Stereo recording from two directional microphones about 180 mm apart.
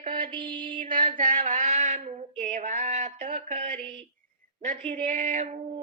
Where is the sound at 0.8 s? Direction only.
50° right (ahead or behind).